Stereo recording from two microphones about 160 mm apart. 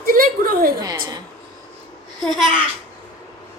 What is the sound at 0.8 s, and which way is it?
Speech, 25° right (ahead or behind).